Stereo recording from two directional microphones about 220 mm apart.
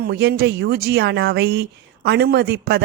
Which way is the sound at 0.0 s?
45° right (ahead or behind).